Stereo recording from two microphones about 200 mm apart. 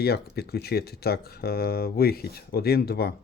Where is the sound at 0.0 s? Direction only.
55° left (ahead or behind).